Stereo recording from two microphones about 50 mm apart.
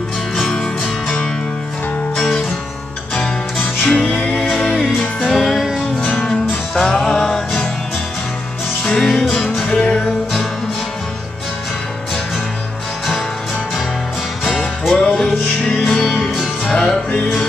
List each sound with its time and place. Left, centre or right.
2.1 s music: centre
3.5 s music: centre
5.9 s music: left
8.8 s music: centre
15.0 s music: centre